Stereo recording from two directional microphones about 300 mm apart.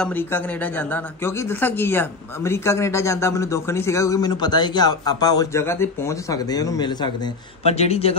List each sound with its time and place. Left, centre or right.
0.0 s speech: centre